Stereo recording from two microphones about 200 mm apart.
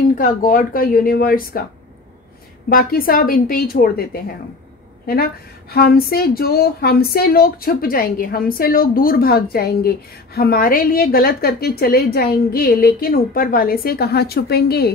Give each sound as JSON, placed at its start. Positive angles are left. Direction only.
{"t": 0.2, "sound": "speech", "side_deg": 45}
{"t": 2.7, "sound": "speech", "side_deg": 45}